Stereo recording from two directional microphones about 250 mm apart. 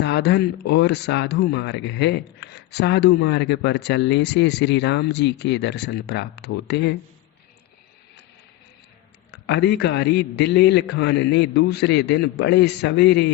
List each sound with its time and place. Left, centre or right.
0.0 s speech: left
9.5 s speech: left